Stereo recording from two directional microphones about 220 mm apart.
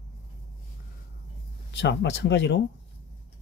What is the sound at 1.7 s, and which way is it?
Speech, 50° left (ahead or behind).